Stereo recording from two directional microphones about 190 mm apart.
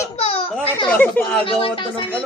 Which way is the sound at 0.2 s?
35° left (ahead or behind).